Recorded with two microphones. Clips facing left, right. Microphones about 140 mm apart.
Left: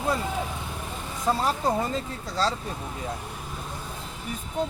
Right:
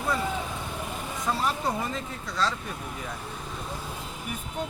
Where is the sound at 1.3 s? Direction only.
30° left (ahead or behind).